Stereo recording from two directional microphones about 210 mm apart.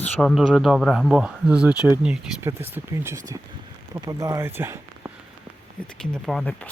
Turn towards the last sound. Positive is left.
turn(degrees=5)  # may be behind; listen again after turning